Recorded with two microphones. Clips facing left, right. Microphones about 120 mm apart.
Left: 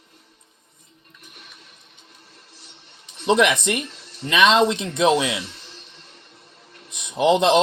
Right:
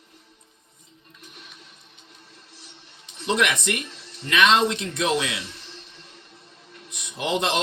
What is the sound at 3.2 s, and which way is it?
Speech, 25° left (ahead or behind).